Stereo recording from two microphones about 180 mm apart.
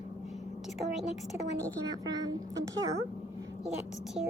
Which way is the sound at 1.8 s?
20° right (ahead or behind).